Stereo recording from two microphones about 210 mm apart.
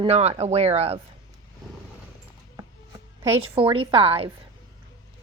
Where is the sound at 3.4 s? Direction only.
25° right (ahead or behind).